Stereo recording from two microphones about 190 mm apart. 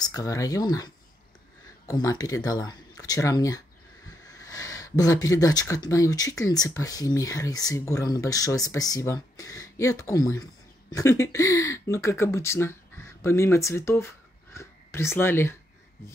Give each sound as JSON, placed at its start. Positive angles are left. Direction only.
{"t": 0.0, "sound": "speech", "side_deg": 20}